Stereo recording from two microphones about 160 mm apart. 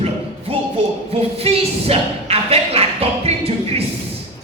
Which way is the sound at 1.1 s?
40° right (ahead or behind).